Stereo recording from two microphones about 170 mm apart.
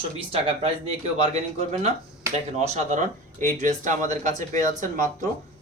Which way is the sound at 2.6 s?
45° right (ahead or behind).